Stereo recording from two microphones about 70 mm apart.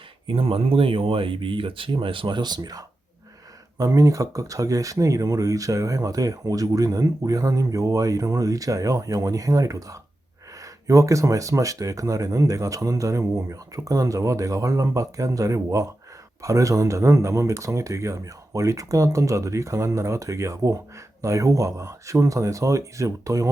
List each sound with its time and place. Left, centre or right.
1.9 s speech: right
3.8 s speech: right